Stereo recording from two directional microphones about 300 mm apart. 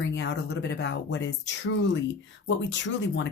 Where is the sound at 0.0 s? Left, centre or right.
Left.